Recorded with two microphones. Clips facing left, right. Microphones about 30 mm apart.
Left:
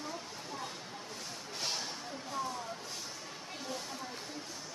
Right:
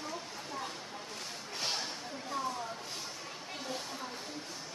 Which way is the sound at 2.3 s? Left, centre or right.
Right.